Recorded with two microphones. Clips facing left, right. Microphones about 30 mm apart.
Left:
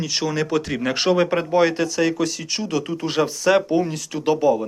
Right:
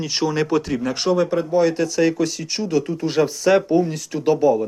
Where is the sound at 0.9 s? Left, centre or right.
Left.